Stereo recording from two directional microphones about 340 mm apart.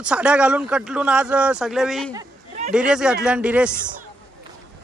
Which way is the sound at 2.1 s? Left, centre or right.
Centre.